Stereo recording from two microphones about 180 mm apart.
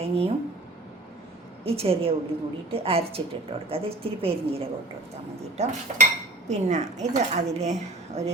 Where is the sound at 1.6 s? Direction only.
30° right (ahead or behind).